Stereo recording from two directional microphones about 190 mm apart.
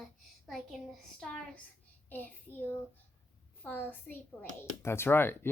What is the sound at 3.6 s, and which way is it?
Speech, 10° left (ahead or behind).